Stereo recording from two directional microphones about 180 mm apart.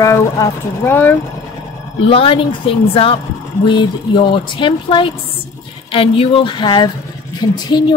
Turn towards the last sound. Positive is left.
turn(degrees=25)  # may be behind; listen again after turning